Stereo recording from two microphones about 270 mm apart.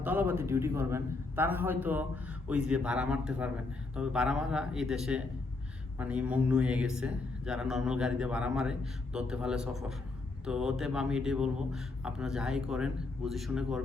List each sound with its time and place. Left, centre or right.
0.0 s a man's voice: centre